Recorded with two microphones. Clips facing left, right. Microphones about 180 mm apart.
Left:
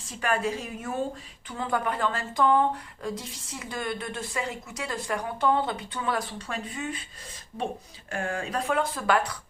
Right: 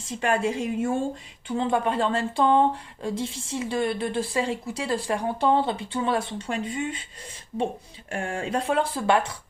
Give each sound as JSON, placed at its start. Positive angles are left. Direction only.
{"t": 0.1, "sound": "speech", "side_deg": -25}
{"t": 8.1, "sound": "speech", "side_deg": -25}